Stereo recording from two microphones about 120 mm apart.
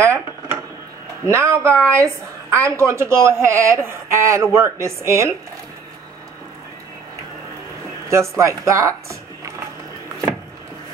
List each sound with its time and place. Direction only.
0.0 s dishes: 25° right (ahead or behind)
1.2 s speech: 25° right (ahead or behind)
1.7 s a woman's voice: 10° left (ahead or behind)
2.8 s speech: 25° right (ahead or behind)
8.1 s speech: 25° right (ahead or behind)